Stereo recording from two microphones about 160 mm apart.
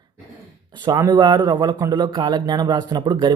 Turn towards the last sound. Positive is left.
turn(degrees=-30)  # may be behind; listen again after turning